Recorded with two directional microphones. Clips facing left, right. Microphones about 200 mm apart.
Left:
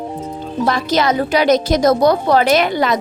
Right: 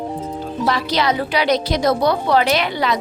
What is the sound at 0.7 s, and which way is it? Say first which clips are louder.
A woman's voice: left 3 dB; 45° left (ahead or behind).